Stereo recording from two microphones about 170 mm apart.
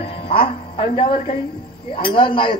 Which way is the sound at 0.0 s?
35° left (ahead or behind).